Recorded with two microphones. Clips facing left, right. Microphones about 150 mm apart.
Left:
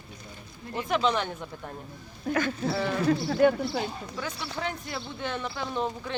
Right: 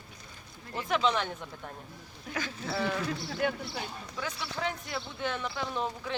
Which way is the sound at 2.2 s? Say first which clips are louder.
Left 9 dB; 50° left (ahead or behind).